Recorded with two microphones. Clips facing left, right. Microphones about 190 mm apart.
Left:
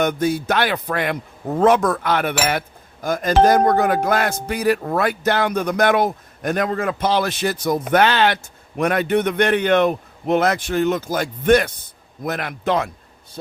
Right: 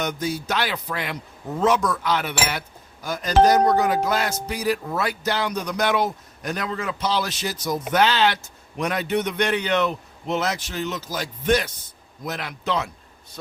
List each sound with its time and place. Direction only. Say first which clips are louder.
0.0 s a man's voice: left 7 dB; 55° left (ahead or behind)